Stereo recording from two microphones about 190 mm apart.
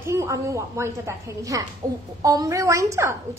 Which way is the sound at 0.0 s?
15° right (ahead or behind).